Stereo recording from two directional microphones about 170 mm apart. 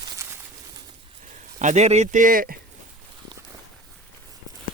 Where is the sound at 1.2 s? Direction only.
45° right (ahead or behind).